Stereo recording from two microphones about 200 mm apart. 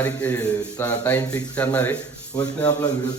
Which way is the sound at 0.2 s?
10° left (ahead or behind).